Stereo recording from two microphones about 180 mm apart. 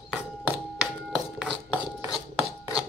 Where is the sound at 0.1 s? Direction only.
5° right (ahead or behind).